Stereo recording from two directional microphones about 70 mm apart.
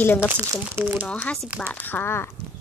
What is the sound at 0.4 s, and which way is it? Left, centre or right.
Speech, right.